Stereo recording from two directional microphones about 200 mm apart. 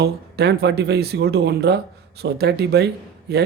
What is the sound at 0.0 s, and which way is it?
Speech, 55° right (ahead or behind).